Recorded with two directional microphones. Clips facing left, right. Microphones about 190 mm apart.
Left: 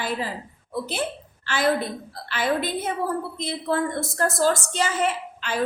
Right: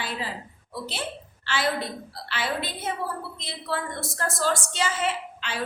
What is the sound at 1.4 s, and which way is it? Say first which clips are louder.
A woman's voice: left 5 dB; 45° left (ahead or behind).